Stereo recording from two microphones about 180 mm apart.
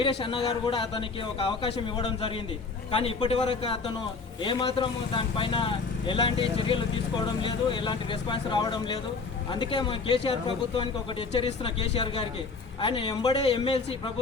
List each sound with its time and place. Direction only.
0.0 s a man's voice: 30° left (ahead or behind)